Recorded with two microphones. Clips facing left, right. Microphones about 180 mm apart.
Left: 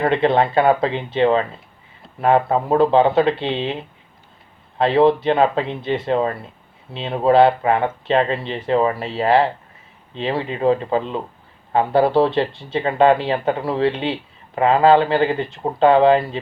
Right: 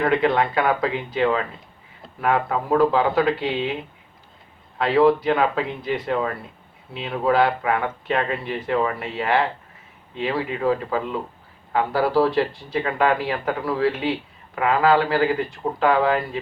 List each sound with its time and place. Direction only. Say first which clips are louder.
0.0 s speech: left 3 dB; 25° left (ahead or behind)
4.8 s speech: left 2 dB; 25° left (ahead or behind)